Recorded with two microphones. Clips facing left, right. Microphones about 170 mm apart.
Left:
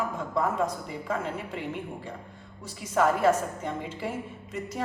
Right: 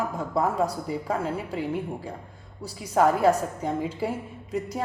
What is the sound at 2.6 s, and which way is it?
A woman's voice, 35° right (ahead or behind).